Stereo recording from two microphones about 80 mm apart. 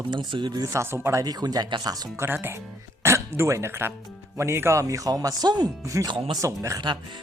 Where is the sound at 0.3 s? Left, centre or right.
Right.